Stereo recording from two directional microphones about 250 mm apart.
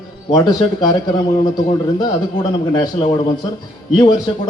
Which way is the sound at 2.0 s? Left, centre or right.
Centre.